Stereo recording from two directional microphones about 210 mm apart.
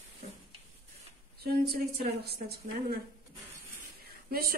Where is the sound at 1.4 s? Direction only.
45° right (ahead or behind).